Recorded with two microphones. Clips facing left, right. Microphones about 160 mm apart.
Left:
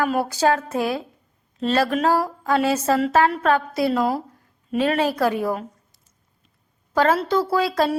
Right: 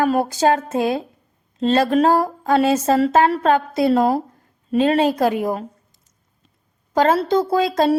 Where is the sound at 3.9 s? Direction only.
45° right (ahead or behind).